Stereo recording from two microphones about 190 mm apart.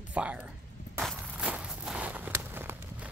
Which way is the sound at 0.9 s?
5° right (ahead or behind).